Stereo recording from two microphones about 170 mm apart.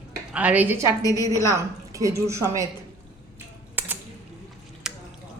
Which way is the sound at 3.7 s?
10° right (ahead or behind).